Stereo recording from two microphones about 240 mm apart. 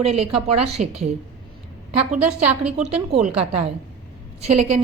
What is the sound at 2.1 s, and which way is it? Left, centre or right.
Speech, centre.